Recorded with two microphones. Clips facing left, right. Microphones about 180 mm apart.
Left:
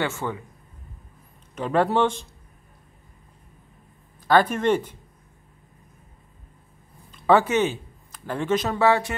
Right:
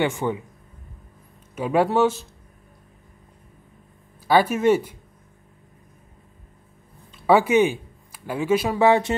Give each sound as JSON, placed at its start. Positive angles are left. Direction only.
{"t": 0.0, "sound": "speech", "side_deg": -15}
{"t": 1.5, "sound": "speech", "side_deg": -10}
{"t": 4.3, "sound": "speech", "side_deg": -10}
{"t": 7.2, "sound": "speech", "side_deg": -10}